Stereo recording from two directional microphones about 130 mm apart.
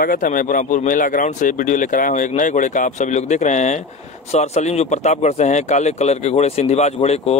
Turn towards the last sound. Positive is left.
turn(degrees=50)  # may be behind; listen again after turning